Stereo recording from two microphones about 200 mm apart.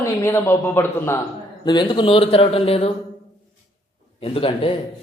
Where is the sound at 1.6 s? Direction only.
20° left (ahead or behind).